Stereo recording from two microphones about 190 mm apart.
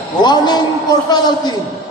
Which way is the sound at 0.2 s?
20° left (ahead or behind).